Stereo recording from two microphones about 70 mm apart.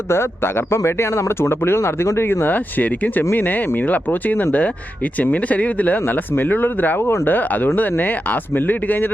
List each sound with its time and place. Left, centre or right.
0.1 s speech: left